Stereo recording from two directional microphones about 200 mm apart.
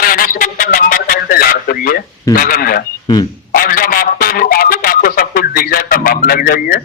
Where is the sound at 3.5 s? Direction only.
45° left (ahead or behind).